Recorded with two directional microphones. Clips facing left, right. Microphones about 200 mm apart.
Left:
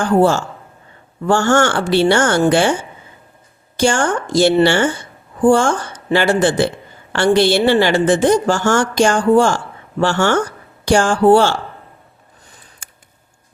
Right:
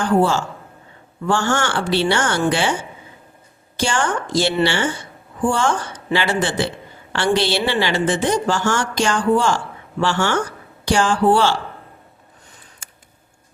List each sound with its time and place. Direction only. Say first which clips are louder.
0.0 s a woman's voice: left 3 dB; 45° left (ahead or behind)
3.8 s a woman's voice: left 5 dB; 45° left (ahead or behind)